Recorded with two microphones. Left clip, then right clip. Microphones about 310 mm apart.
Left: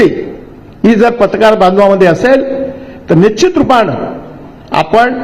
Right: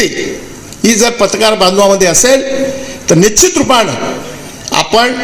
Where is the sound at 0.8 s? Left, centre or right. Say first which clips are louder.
Left 2 dB; right.